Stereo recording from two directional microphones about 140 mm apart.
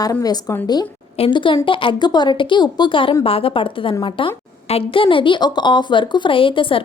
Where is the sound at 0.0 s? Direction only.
25° left (ahead or behind).